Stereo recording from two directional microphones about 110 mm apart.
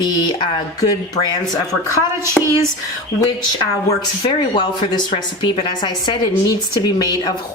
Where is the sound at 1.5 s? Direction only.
30° left (ahead or behind).